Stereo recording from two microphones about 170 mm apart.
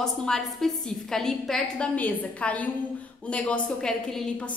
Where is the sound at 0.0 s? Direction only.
5° left (ahead or behind).